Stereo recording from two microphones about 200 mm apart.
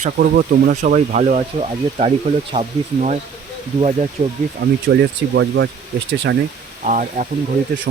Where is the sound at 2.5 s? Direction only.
35° right (ahead or behind).